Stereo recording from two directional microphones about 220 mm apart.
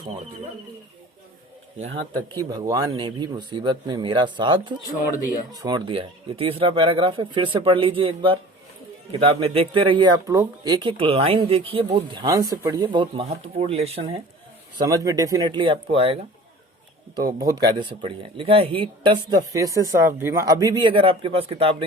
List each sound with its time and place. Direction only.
2.3 s speech: 20° right (ahead or behind)
14.8 s speech: 15° right (ahead or behind)
17.2 s speech: 15° right (ahead or behind)